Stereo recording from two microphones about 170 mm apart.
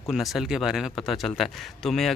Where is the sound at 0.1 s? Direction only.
Centre (ahead or behind).